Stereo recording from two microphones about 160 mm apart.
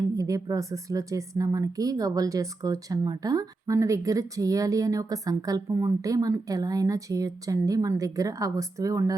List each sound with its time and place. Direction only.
0.2 s a woman's voice: 20° right (ahead or behind)